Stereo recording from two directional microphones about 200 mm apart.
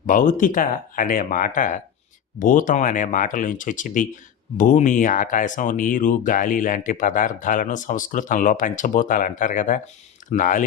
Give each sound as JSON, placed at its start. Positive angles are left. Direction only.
{"t": 0.0, "sound": "speech", "side_deg": 40}